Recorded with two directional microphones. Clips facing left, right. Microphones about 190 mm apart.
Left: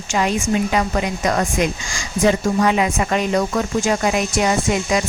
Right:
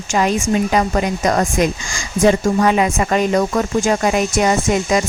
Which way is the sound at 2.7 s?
45° right (ahead or behind).